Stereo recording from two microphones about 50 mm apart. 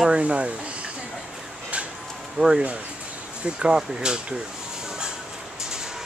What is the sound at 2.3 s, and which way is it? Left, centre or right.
Speech, centre.